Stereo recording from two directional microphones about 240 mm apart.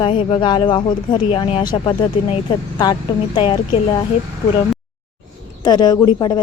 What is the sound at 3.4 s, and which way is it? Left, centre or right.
Speech, centre.